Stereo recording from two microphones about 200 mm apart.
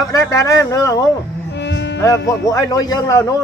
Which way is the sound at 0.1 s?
15° left (ahead or behind).